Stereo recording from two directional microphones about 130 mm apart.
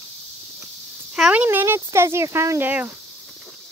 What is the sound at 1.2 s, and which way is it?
Speech, 5° right (ahead or behind).